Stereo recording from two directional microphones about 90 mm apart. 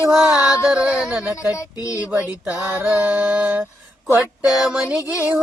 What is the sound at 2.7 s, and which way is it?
Mantra, 20° right (ahead or behind).